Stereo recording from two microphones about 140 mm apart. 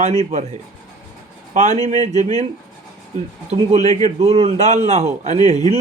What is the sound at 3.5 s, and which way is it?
A man's voice, 50° right (ahead or behind).